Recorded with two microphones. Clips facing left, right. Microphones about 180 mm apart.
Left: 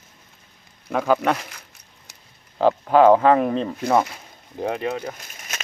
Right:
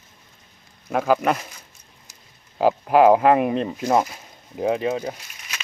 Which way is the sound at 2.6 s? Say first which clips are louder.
Even; 10° right (ahead or behind).